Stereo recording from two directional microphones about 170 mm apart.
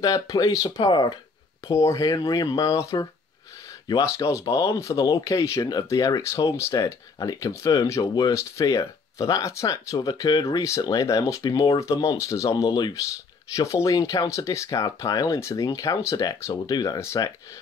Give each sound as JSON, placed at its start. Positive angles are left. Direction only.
{"t": 0.0, "sound": "speech", "side_deg": 20}